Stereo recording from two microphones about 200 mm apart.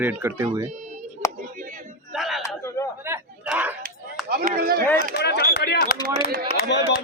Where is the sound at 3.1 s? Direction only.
5° right (ahead or behind).